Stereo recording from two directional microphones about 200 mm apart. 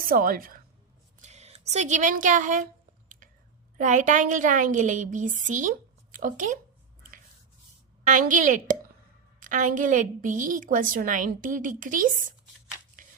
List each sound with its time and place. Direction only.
0.0 s a woman's voice: 45° right (ahead or behind)
1.2 s speech: 35° right (ahead or behind)
3.8 s a woman's voice: 40° right (ahead or behind)
8.0 s a woman's voice: 40° right (ahead or behind)